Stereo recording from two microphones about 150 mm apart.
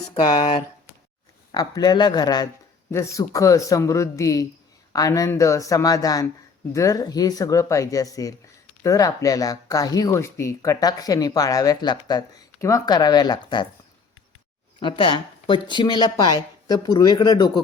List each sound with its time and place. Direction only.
0.1 s speech: 30° left (ahead or behind)
1.5 s speech: 25° left (ahead or behind)
14.8 s speech: 30° left (ahead or behind)